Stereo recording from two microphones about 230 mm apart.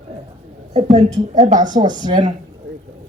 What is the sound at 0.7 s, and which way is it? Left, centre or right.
Speech, right.